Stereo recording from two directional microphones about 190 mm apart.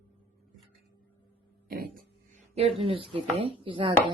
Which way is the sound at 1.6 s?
50° right (ahead or behind).